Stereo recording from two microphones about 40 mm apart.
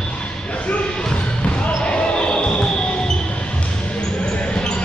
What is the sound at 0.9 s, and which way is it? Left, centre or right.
Basketball bounce, left.